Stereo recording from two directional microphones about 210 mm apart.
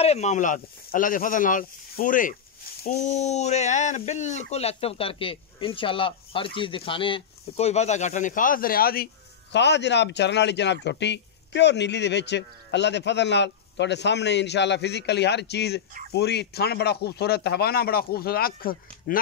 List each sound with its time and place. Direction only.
0.0 s speech: 30° left (ahead or behind)
3.1 s speech: 30° left (ahead or behind)